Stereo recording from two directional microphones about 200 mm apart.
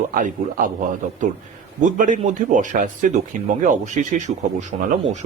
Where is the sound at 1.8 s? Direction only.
40° right (ahead or behind).